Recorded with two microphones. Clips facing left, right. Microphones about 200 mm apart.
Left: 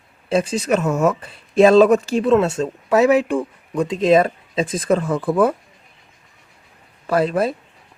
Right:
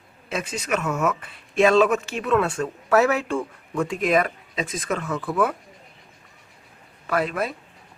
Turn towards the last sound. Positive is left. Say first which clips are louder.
# left 6 dB
turn(degrees=30)  # may be behind; listen again after turning